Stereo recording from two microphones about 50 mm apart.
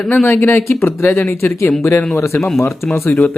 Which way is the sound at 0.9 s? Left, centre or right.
Left.